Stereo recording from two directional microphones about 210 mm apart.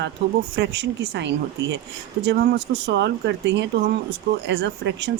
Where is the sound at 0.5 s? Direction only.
50° right (ahead or behind).